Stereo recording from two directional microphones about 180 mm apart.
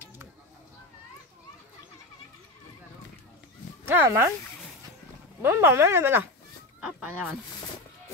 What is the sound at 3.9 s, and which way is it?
Speech, 15° right (ahead or behind).